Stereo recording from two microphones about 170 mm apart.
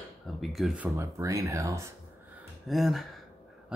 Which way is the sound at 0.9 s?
20° right (ahead or behind).